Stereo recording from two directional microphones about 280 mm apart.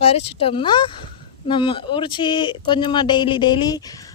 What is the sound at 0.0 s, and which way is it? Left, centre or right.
Speech, left.